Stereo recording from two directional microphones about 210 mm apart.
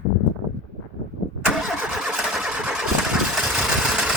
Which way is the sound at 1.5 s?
Centre (ahead or behind).